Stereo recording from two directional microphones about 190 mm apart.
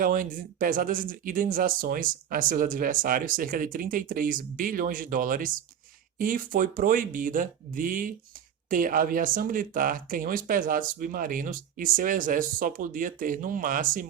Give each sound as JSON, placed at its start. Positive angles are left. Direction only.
{"t": 0.0, "sound": "speech", "side_deg": -45}